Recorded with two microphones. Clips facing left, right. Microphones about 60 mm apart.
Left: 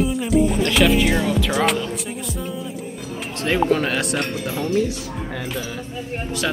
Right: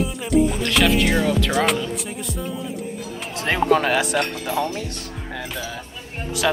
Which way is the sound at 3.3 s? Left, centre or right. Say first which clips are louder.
Even; centre.